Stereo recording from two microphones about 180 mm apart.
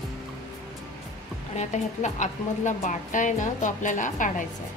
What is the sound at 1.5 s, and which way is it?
Speech, 40° left (ahead or behind).